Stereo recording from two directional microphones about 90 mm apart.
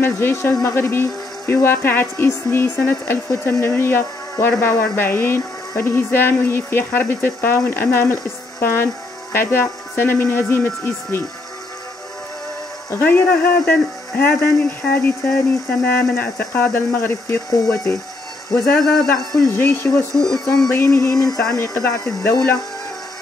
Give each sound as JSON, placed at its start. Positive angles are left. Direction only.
{"t": 0.0, "sound": "speech", "side_deg": 25}
{"t": 12.9, "sound": "speech", "side_deg": 20}
{"t": 17.5, "sound": "a sound", "side_deg": 40}
{"t": 18.8, "sound": "speech", "side_deg": 5}
{"t": 19.5, "sound": "speech", "side_deg": 25}
{"t": 20.2, "sound": "speech", "side_deg": 45}
{"t": 20.7, "sound": "a sound", "side_deg": 30}